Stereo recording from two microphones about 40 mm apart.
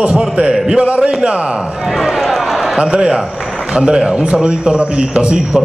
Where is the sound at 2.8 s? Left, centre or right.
Centre.